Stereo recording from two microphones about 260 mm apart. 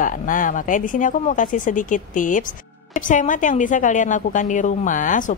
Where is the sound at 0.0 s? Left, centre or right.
Left.